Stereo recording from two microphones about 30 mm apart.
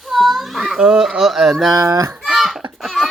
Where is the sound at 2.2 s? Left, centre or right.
Centre.